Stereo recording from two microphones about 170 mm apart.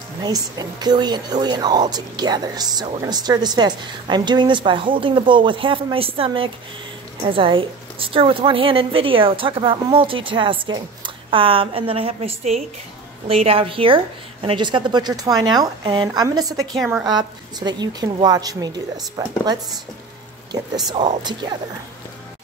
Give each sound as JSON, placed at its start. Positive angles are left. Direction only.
{"t": 0.2, "sound": "a woman's voice", "side_deg": -25}
{"t": 16.7, "sound": "a woman's voice", "side_deg": 0}
{"t": 17.0, "sound": "speech", "side_deg": -25}
{"t": 20.7, "sound": "speech", "side_deg": -25}